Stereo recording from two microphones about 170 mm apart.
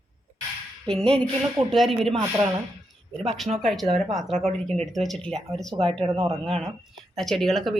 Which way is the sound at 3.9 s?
45° right (ahead or behind).